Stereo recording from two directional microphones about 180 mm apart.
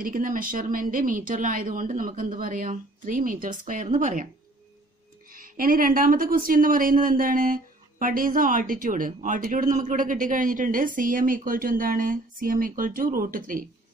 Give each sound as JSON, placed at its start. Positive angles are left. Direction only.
{"t": 0.0, "sound": "speech", "side_deg": -50}
{"t": 5.3, "sound": "speech", "side_deg": -50}